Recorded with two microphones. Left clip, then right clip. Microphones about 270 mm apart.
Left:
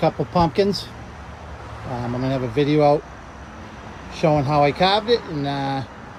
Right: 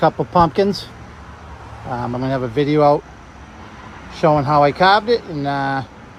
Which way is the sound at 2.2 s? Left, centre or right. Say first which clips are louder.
Right 1 dB; centre.